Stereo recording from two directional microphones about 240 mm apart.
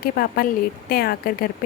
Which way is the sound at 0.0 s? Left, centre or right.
Left.